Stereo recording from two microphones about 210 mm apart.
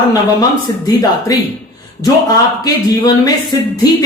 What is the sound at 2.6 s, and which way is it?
Speech, 15° left (ahead or behind).